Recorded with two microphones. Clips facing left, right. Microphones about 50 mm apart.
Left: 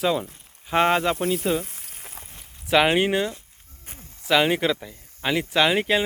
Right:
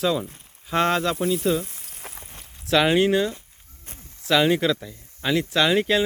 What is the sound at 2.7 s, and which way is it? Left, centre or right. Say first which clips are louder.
Speech: right 1 dB; centre.